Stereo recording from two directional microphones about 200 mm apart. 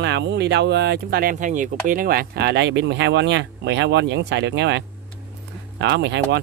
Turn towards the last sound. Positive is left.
turn(degrees=-60)  # may be behind; listen again after turning